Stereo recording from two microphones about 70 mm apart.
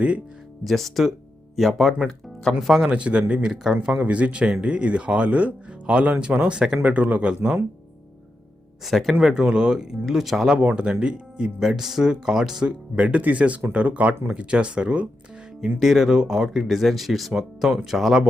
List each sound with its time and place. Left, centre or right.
0.6 s speech: centre
2.9 s speech: centre
8.8 s speech: centre
10.6 s speech: centre
13.0 s speech: right
15.6 s speech: centre